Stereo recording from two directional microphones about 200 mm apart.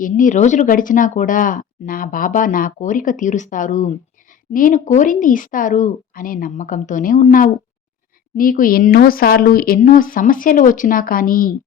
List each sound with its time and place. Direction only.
0.0 s speech: 40° left (ahead or behind)